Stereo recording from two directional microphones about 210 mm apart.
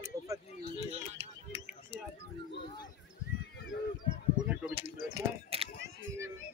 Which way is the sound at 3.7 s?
55° left (ahead or behind).